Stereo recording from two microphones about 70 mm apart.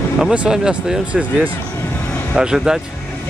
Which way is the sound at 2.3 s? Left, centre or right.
Centre.